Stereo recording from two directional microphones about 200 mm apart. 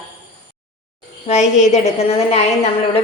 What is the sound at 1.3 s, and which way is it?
A woman's voice, 35° left (ahead or behind).